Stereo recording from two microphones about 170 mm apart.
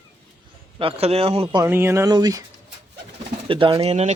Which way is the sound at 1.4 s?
20° right (ahead or behind).